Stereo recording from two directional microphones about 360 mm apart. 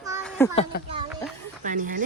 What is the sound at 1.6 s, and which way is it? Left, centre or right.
Speech, right.